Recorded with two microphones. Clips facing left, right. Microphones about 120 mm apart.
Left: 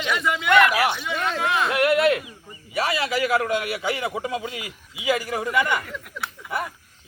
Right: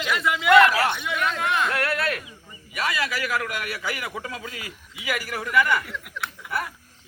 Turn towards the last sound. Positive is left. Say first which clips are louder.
# left 1 dB
turn(degrees=20)  # may be behind; listen again after turning